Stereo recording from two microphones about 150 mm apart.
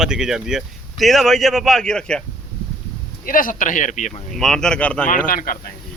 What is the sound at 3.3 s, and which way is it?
Speech, 65° left (ahead or behind).